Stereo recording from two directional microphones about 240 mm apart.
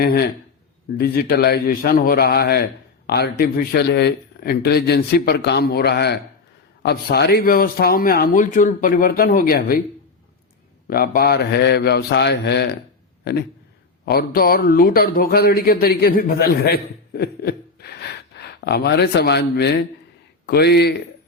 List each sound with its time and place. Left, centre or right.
0.0 s speech: left
10.8 s speech: left
14.0 s speech: left